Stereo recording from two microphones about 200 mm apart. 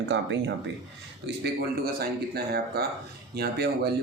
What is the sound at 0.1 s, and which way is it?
Speech, 60° right (ahead or behind).